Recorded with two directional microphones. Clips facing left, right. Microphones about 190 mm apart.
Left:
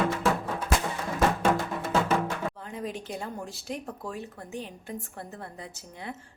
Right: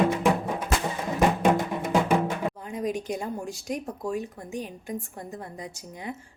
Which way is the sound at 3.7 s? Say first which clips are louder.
Right 6 dB; 15° right (ahead or behind).